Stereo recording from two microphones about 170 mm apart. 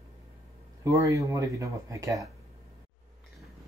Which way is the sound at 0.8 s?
20° right (ahead or behind).